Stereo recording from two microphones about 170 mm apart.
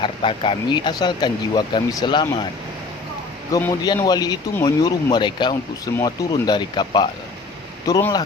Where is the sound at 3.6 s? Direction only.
20° left (ahead or behind).